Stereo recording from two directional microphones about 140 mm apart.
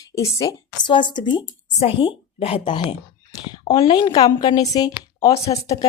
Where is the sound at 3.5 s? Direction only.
30° left (ahead or behind).